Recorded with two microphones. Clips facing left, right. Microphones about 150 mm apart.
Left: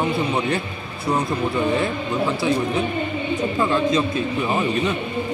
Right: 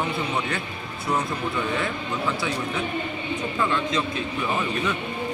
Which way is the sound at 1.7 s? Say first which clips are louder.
Left 5 dB; 30° left (ahead or behind).